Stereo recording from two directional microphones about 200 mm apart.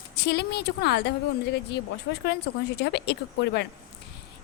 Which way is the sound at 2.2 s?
55° left (ahead or behind).